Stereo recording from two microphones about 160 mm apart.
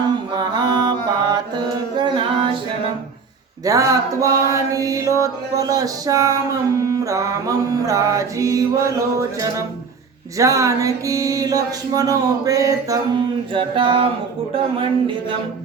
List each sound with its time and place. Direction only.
0.3 s mantra: 25° right (ahead or behind)
3.6 s music: 20° right (ahead or behind)
14.5 s a man's voice: 35° right (ahead or behind)